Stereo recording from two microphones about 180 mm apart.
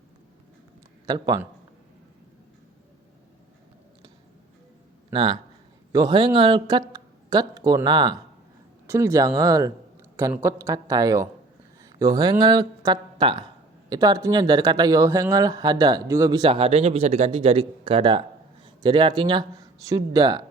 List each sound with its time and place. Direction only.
1.0 s speech: 20° right (ahead or behind)
5.1 s speech: 30° right (ahead or behind)